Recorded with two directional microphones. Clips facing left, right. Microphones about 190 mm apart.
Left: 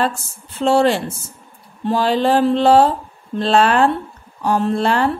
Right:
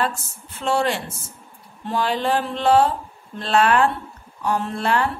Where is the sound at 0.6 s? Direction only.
30° left (ahead or behind).